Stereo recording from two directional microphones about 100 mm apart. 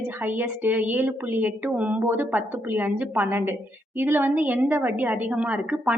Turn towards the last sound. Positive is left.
turn(degrees=-15)  # may be behind; listen again after turning